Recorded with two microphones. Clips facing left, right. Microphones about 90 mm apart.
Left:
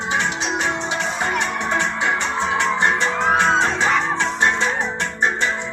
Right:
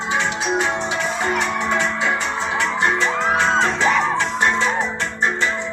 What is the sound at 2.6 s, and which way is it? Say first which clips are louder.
Music: right 1 dB; 20° left (ahead or behind).